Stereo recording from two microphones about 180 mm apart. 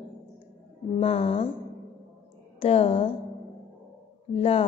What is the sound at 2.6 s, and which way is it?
Speech, 35° left (ahead or behind).